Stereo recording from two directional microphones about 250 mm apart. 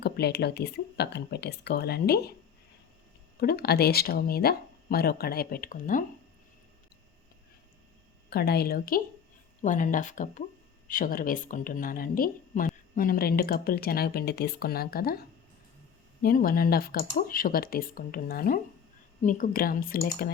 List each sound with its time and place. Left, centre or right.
0.0 s speech: left
3.4 s speech: left
8.3 s speech: left
16.2 s speech: left